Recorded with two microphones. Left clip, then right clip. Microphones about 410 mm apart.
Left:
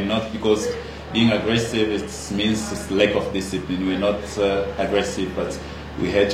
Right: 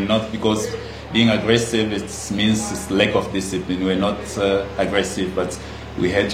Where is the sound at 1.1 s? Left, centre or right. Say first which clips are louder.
Right 3 dB; right.